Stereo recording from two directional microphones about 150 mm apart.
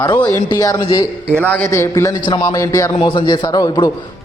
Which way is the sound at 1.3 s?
10° left (ahead or behind).